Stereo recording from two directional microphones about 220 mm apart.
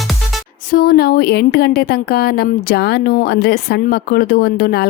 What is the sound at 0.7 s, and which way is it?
Speech, 40° left (ahead or behind).